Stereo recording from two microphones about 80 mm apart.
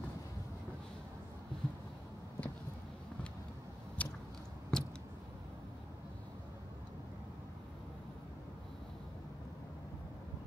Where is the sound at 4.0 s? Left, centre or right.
Centre.